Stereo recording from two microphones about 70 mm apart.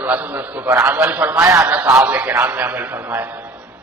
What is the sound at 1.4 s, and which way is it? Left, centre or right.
Speech, right.